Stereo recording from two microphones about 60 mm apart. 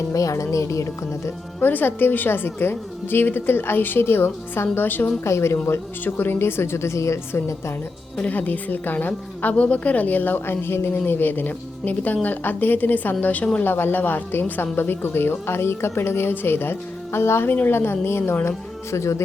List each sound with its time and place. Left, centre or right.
0.1 s speech: left
1.6 s a woman's voice: left
5.2 s speech: left
8.2 s a woman's voice: left
13.6 s a woman's voice: left